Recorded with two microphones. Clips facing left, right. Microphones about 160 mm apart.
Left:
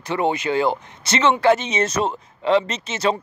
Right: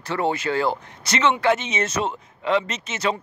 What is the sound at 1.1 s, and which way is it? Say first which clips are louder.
Speech: left 3 dB; 35° left (ahead or behind).